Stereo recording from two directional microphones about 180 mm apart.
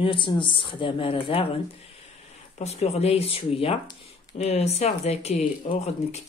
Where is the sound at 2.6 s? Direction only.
35° left (ahead or behind).